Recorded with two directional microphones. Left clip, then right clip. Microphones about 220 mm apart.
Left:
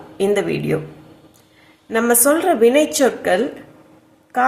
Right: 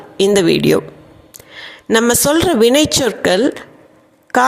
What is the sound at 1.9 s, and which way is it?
A woman's voice, 40° right (ahead or behind).